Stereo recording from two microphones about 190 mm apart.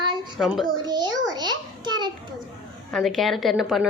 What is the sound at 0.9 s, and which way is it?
A child's voice, 20° right (ahead or behind).